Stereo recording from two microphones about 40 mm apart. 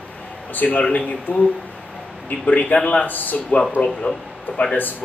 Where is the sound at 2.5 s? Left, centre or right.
Left.